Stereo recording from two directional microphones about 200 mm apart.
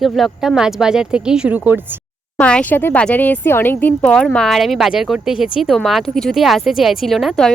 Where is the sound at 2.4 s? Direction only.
5° left (ahead or behind).